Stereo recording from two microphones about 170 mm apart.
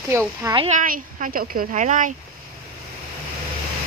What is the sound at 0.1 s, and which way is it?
Speech, 15° right (ahead or behind).